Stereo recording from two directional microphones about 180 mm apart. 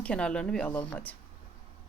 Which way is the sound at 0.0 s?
5° left (ahead or behind).